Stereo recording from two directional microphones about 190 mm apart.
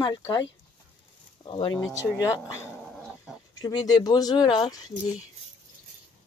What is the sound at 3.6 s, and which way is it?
Speech, 20° left (ahead or behind).